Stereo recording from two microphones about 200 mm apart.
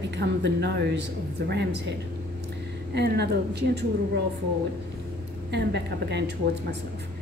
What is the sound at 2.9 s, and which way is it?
Speech, 55° right (ahead or behind).